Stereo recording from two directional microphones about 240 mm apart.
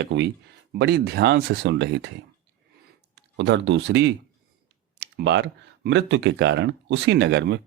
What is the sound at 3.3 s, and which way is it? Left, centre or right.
Speech, right.